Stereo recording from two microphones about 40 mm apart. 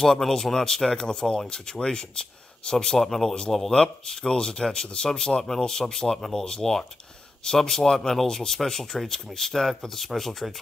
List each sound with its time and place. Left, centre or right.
0.0 s speech: centre
3.0 s speech: centre
3.7 s speech: centre